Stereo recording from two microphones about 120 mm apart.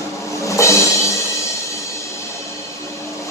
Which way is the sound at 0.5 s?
25° left (ahead or behind).